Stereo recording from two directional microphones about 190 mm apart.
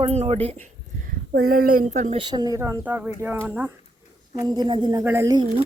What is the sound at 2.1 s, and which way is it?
A woman's voice, 25° right (ahead or behind).